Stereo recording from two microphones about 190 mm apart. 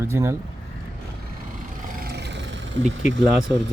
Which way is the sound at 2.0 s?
60° right (ahead or behind).